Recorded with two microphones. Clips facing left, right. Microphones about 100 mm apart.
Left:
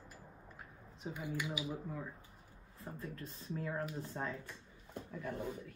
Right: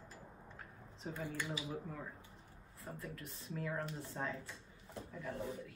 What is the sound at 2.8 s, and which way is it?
Speech, 35° left (ahead or behind).